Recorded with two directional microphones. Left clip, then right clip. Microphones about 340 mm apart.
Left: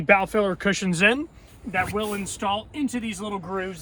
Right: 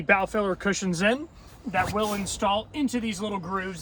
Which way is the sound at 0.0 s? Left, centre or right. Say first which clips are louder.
Left 3 dB; left.